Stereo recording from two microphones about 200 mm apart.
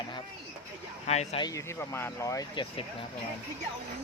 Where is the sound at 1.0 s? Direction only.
35° left (ahead or behind).